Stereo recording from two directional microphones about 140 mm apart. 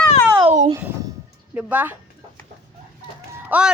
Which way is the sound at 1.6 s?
10° right (ahead or behind).